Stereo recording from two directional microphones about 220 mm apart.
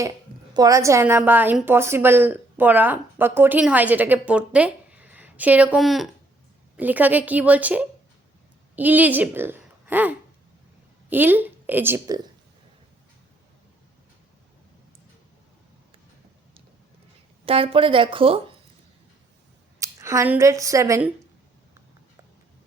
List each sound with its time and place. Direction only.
0.5 s a woman's voice: 15° right (ahead or behind)
17.4 s a woman's voice: 25° right (ahead or behind)
19.8 s speech: 15° right (ahead or behind)